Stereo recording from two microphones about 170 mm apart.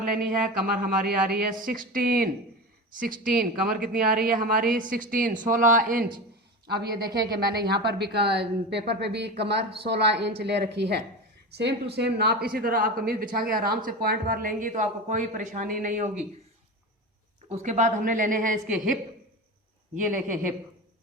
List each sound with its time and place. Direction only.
0.0 s speech: 55° right (ahead or behind)
6.7 s a woman's voice: 65° right (ahead or behind)
12.5 s speech: 60° right (ahead or behind)
17.5 s speech: 45° right (ahead or behind)
20.2 s speech: 50° right (ahead or behind)